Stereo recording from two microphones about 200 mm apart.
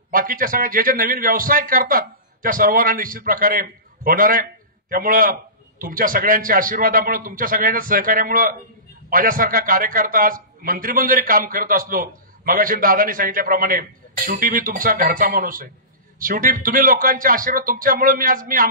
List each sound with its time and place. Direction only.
0.1 s a man's voice: 45° right (ahead or behind)